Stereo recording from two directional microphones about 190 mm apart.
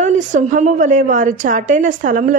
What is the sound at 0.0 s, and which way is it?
A woman's voice, 40° right (ahead or behind).